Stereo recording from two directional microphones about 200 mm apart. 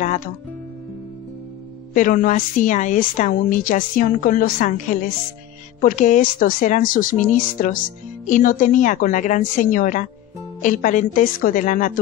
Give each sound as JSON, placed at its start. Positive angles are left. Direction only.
{"t": 2.0, "sound": "a woman's voice", "side_deg": 40}